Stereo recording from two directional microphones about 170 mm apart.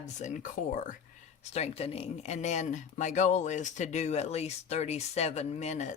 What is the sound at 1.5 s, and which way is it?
Speech, 35° left (ahead or behind).